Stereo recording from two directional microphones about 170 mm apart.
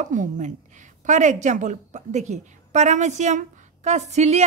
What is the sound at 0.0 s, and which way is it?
A woman's voice, 50° right (ahead or behind).